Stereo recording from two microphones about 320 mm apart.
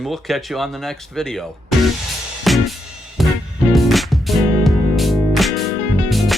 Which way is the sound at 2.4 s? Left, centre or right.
Centre.